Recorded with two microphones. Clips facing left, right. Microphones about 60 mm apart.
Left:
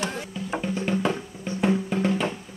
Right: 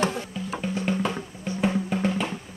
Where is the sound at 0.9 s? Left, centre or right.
Centre.